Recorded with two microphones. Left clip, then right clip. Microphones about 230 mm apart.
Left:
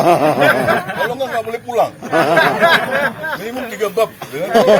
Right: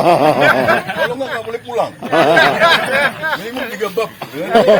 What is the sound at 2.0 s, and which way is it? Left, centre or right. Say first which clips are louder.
Speech: right 6 dB; centre.